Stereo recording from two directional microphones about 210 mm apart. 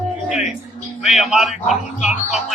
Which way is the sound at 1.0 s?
Centre (ahead or behind).